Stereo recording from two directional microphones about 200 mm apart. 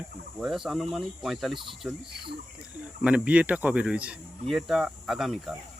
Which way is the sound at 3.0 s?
5° right (ahead or behind).